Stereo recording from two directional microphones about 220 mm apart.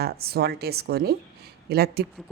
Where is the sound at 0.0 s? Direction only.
45° right (ahead or behind).